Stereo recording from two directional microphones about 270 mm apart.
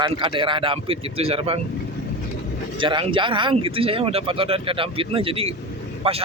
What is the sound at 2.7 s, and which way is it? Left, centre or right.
Speech, centre.